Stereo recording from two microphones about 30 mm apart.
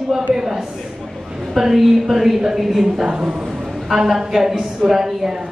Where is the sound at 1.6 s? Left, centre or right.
Centre.